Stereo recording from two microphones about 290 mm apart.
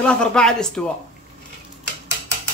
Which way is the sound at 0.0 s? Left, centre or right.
Centre.